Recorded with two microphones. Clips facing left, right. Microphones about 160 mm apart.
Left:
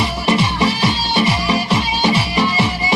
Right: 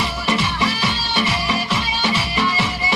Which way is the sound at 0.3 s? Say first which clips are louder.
Left 5 dB; 35° left (ahead or behind).